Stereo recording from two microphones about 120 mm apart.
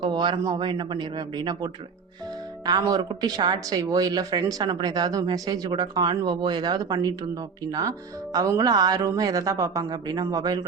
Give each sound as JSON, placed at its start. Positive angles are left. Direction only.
{"t": 0.0, "sound": "speech", "side_deg": -40}